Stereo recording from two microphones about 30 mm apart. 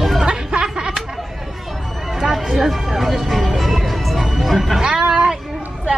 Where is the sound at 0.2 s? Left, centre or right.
Right.